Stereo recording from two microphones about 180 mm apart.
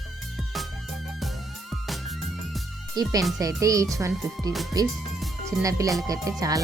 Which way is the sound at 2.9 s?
20° right (ahead or behind).